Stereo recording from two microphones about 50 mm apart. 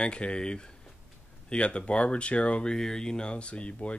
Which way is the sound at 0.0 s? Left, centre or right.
Left.